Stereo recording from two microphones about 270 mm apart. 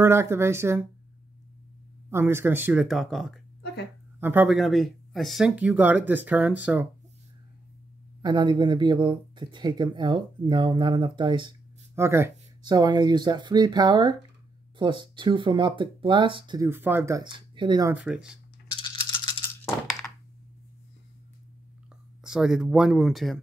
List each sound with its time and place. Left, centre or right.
0.0 s speech: centre
2.0 s speech: centre
8.2 s speech: centre
19.2 s coin: centre
22.2 s speech: centre